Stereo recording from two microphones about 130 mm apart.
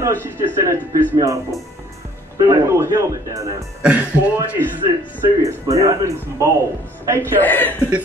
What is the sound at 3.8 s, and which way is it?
Speech, 10° right (ahead or behind).